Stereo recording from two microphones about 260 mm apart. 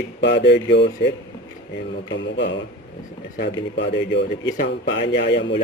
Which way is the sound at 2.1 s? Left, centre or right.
Left.